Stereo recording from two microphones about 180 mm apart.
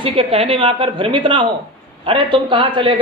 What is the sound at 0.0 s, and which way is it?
A man's voice, 30° right (ahead or behind).